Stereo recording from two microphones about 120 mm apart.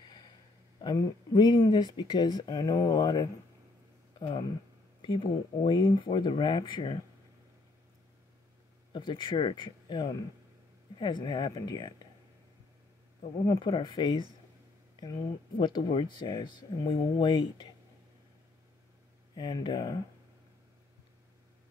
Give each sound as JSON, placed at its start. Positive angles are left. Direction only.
{"t": 0.0, "sound": "a sound", "side_deg": 35}
{"t": 0.7, "sound": "speech", "side_deg": 35}
{"t": 4.2, "sound": "speech", "side_deg": 40}
{"t": 8.9, "sound": "speech", "side_deg": 40}
{"t": 13.5, "sound": "speech", "side_deg": 40}
{"t": 15.6, "sound": "speech", "side_deg": 40}
{"t": 19.3, "sound": "speech", "side_deg": 40}